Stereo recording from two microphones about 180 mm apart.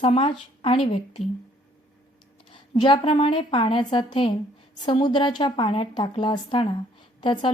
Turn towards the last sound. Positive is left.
turn(degrees=25)  # may be behind; listen again after turning